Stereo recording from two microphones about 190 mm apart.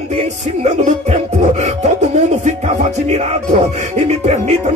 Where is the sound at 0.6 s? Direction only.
35° right (ahead or behind).